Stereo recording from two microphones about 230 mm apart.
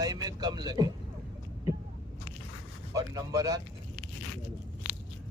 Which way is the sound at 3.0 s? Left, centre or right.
Centre.